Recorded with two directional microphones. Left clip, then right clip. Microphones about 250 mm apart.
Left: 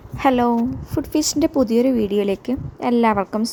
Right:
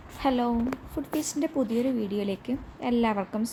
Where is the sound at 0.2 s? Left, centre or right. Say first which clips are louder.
Left 9 dB; left.